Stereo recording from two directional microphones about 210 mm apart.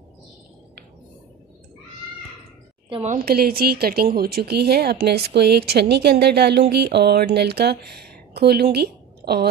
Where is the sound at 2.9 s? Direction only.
35° right (ahead or behind).